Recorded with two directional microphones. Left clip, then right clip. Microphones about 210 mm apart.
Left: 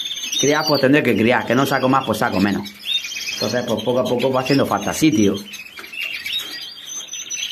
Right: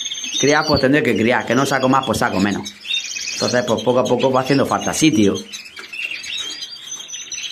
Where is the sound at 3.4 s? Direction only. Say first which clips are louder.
Right 4 dB; 20° right (ahead or behind).